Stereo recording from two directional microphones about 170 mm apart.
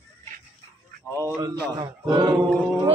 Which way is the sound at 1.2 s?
20° right (ahead or behind).